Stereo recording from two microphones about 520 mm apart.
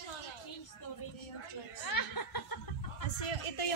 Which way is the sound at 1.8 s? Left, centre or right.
Left.